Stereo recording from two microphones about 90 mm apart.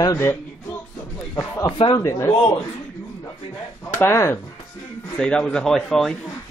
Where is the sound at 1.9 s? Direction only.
35° left (ahead or behind).